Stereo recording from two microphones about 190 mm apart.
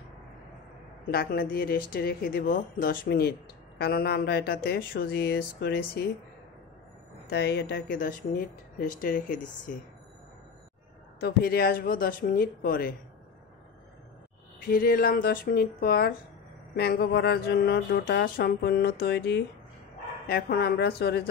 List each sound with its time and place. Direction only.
1.1 s speech: 55° left (ahead or behind)
7.2 s mantra: 60° left (ahead or behind)
9.0 s speech: 45° left (ahead or behind)
11.1 s speech: 55° left (ahead or behind)
14.6 s speech: 50° left (ahead or behind)
16.7 s mantra: 55° left (ahead or behind)